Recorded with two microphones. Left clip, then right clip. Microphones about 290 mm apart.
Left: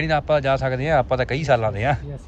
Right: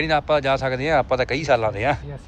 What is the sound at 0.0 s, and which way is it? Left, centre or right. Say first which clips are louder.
Speech: even; centre.